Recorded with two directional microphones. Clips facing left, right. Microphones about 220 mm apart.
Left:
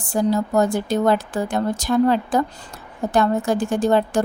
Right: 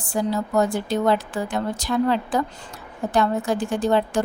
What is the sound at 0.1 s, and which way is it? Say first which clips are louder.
A woman's voice: left 3 dB; 45° left (ahead or behind).